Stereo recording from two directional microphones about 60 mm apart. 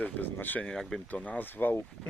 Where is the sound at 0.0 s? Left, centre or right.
Left.